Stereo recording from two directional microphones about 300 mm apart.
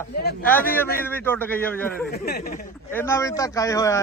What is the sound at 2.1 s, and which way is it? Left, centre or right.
Speech, left.